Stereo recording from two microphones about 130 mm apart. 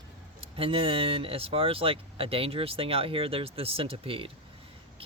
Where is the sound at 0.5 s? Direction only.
45° right (ahead or behind).